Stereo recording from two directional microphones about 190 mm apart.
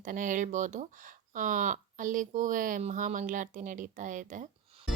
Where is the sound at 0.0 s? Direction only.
45° right (ahead or behind).